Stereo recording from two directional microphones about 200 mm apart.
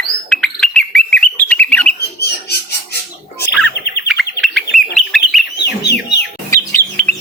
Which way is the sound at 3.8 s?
55° left (ahead or behind).